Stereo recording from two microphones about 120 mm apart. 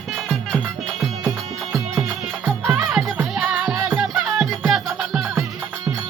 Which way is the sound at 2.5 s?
10° right (ahead or behind).